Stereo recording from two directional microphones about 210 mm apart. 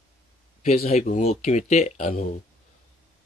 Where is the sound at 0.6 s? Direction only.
30° left (ahead or behind).